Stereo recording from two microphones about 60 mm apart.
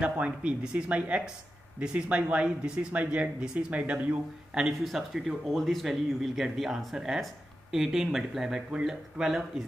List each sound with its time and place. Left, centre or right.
0.0 s speech: right
4.6 s speech: centre